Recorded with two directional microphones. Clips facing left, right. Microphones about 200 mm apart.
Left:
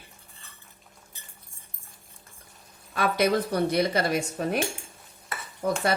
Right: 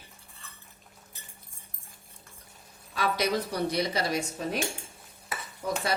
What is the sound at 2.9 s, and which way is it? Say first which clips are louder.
Speech: left 4 dB; 55° left (ahead or behind).